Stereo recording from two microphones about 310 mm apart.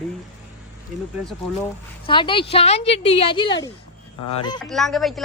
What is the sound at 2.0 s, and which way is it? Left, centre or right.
Speech, centre.